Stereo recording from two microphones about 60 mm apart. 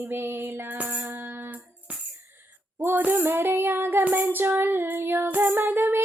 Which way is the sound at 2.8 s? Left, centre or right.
Right.